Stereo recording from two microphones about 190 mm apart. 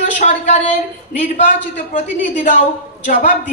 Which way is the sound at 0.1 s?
40° left (ahead or behind).